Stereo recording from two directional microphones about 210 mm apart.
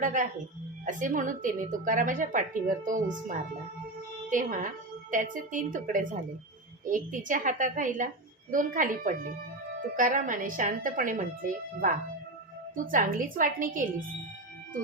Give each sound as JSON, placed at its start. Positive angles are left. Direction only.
{"t": 0.0, "sound": "a woman's voice", "side_deg": -40}